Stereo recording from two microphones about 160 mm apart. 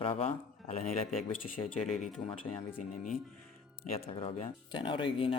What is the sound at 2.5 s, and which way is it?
Speech, 20° left (ahead or behind).